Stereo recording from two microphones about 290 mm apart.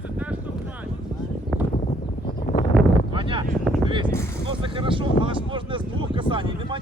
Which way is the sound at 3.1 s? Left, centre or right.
Centre.